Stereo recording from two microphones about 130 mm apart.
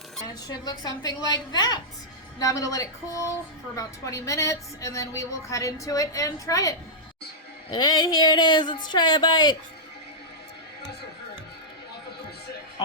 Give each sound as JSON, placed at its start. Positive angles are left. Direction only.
{"t": 0.4, "sound": "a woman's voice", "side_deg": 30}